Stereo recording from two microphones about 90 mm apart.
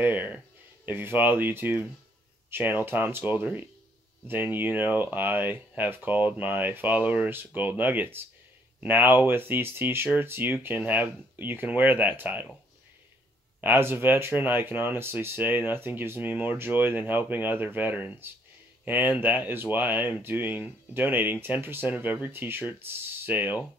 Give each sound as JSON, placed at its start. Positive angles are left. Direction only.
{"t": 0.0, "sound": "a sound", "side_deg": -20}
{"t": 0.8, "sound": "speech", "side_deg": -20}
{"t": 13.6, "sound": "speech", "side_deg": -20}